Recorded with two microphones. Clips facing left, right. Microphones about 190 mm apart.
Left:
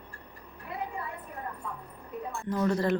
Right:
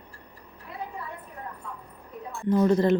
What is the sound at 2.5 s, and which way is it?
Speech, 20° right (ahead or behind).